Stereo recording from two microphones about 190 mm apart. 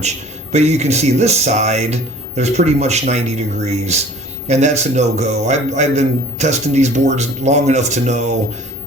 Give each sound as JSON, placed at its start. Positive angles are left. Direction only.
{"t": 0.5, "sound": "a man's voice", "side_deg": -35}